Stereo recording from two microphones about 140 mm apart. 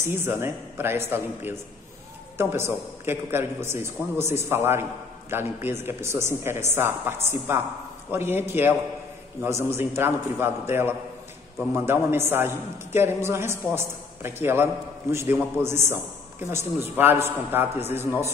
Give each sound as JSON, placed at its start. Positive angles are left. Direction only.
{"t": 0.0, "sound": "a man's voice", "side_deg": -15}